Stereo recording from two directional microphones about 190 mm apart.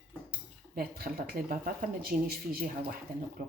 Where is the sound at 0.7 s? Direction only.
50° right (ahead or behind).